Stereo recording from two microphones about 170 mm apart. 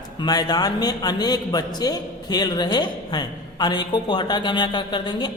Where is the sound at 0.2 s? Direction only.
25° left (ahead or behind).